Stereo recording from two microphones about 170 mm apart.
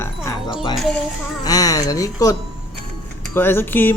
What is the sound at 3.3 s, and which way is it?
Speech, 10° left (ahead or behind).